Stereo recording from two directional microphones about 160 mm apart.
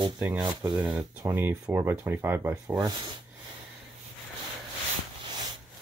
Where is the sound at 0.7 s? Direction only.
10° right (ahead or behind).